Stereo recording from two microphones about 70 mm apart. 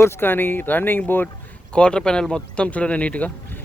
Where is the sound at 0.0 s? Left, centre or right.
Left.